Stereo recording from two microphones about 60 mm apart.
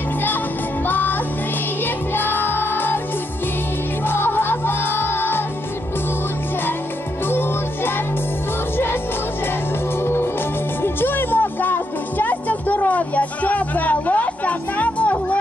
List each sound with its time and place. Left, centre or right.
0.8 s music: left
4.1 s music: left
7.2 s music: left
10.8 s music: left